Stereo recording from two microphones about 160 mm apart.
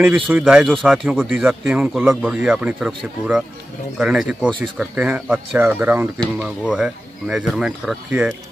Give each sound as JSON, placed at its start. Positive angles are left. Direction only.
{"t": 0.0, "sound": "speech", "side_deg": -5}